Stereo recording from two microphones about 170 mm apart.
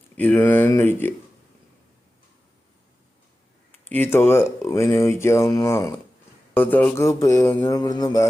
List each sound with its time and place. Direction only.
0.2 s speech: 10° left (ahead or behind)
3.8 s speech: 10° left (ahead or behind)